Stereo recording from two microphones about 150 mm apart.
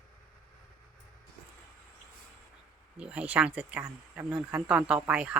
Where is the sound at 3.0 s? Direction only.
10° right (ahead or behind).